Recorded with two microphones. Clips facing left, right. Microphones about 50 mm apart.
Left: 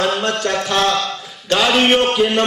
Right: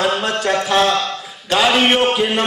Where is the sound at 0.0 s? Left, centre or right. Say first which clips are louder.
Even; centre.